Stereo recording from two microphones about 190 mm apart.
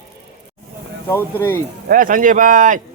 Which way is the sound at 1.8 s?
45° right (ahead or behind).